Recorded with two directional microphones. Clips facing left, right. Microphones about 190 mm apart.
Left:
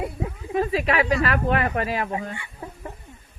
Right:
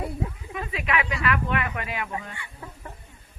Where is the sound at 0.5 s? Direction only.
35° left (ahead or behind).